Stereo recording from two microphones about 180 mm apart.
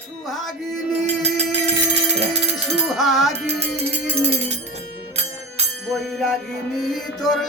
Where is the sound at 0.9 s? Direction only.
35° right (ahead or behind).